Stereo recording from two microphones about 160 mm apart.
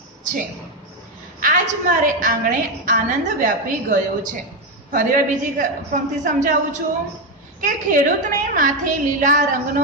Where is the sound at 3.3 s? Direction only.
55° right (ahead or behind).